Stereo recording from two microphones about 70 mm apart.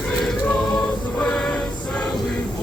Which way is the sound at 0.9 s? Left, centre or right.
Centre.